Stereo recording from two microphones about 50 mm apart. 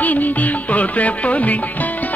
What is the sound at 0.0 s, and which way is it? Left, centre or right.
Music, left.